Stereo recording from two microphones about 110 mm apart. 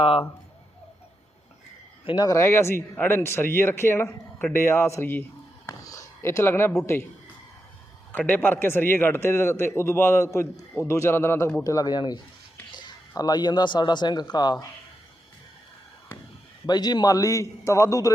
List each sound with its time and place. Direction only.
0.0 s speech: 55° left (ahead or behind)
2.1 s a man's voice: 35° left (ahead or behind)
2.4 s a man's voice: 25° left (ahead or behind)
5.6 s a sound: 30° left (ahead or behind)
8.3 s a man's voice: 20° left (ahead or behind); by 14.7 s 40° left (ahead or behind)
16.6 s a man's voice: 40° left (ahead or behind)